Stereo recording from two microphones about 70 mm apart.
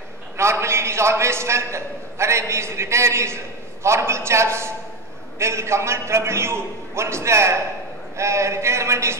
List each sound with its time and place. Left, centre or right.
0.4 s a man's voice: right